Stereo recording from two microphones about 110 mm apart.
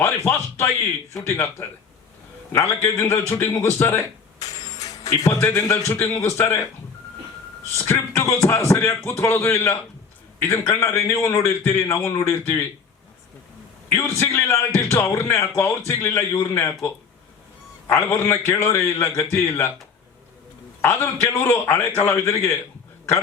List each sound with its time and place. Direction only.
0.3 s a man's voice: 20° left (ahead or behind)
7.9 s a man's voice: 25° left (ahead or behind)
13.9 s a man's voice: 25° left (ahead or behind)
20.8 s a man's voice: 25° left (ahead or behind)